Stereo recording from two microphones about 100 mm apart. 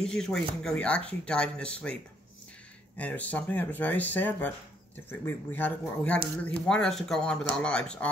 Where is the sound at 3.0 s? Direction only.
15° left (ahead or behind).